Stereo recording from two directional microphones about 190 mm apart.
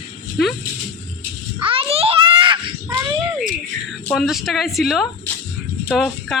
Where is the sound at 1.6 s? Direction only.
30° right (ahead or behind).